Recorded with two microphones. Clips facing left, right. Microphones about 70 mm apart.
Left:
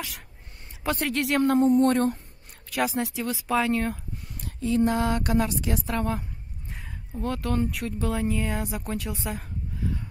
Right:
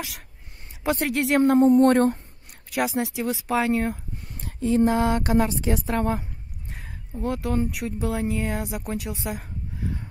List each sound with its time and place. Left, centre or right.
0.8 s a woman's voice: centre
1.6 s a sound: right
2.7 s speech: centre
4.5 s a woman's voice: right
7.2 s speech: centre